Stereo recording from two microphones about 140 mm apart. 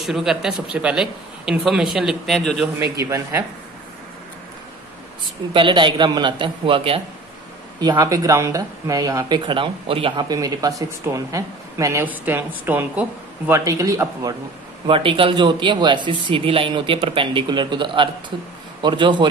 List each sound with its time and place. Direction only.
0.0 s speech: centre (ahead or behind)
3.0 s speech: 20° right (ahead or behind)
5.5 s speech: 35° right (ahead or behind)
7.8 s speech: 25° right (ahead or behind)
14.9 s speech: 40° right (ahead or behind)